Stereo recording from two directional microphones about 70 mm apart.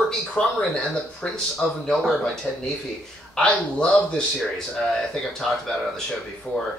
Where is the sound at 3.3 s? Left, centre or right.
Centre.